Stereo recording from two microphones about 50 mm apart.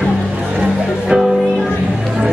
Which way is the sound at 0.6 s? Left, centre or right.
Centre.